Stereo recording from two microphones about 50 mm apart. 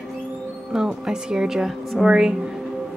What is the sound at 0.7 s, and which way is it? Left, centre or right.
Speech, centre.